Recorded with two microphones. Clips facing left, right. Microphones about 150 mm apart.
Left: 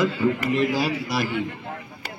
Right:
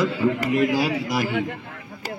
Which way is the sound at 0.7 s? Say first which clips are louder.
Right 2 dB; 20° right (ahead or behind).